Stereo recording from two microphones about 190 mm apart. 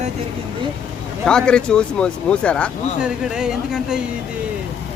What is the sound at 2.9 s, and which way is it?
Speech, 5° right (ahead or behind).